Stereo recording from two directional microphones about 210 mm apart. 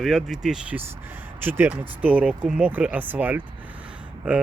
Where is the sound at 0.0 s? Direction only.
Centre (ahead or behind).